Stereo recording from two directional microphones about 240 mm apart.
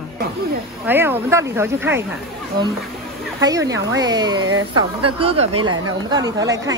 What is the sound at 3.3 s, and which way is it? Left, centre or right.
Speech, centre.